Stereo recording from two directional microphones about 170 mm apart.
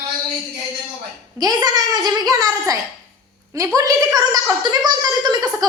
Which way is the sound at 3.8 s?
20° right (ahead or behind).